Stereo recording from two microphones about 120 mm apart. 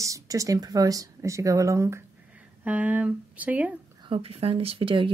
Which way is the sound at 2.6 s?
10° right (ahead or behind).